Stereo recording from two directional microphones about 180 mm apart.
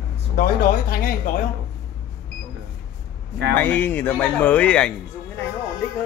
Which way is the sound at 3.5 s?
10° left (ahead or behind).